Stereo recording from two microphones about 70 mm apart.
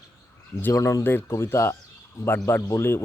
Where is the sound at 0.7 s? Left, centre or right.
Left.